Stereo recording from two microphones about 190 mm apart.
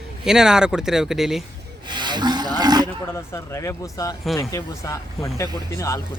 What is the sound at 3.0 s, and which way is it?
Speech, 15° left (ahead or behind).